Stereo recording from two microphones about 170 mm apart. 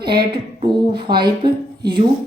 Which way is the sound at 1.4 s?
25° right (ahead or behind).